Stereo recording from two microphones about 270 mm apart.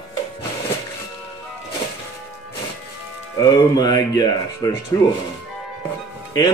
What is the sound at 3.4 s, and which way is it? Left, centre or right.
Speech, centre.